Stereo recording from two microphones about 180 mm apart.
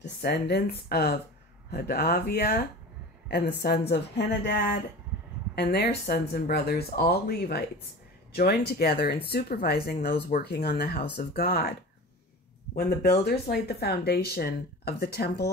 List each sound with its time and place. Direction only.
0.0 s a woman's voice: 60° left (ahead or behind)
5.6 s speech: 65° left (ahead or behind)
12.7 s speech: 60° left (ahead or behind)